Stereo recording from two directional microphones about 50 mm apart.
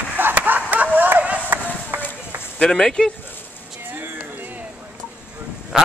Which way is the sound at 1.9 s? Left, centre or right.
Right.